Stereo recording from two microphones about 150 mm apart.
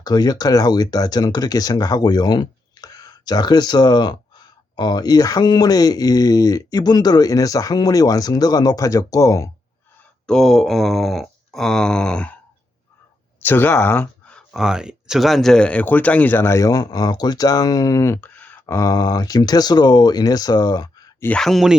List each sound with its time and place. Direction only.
0.0 s speech: 25° left (ahead or behind)
10.2 s speech: 5° left (ahead or behind)
13.4 s speech: 15° left (ahead or behind)
21.2 s speech: 5° left (ahead or behind)